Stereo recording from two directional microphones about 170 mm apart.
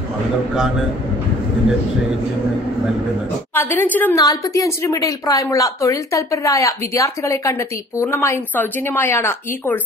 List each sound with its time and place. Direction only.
3.5 s a woman's voice: 10° left (ahead or behind)